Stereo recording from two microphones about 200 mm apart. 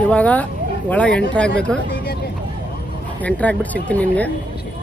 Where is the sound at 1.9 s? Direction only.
50° left (ahead or behind).